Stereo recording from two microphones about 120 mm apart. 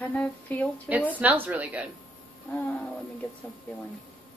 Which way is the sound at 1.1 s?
15° right (ahead or behind).